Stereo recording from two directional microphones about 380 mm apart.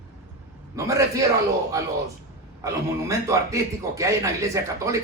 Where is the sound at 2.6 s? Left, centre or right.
Centre.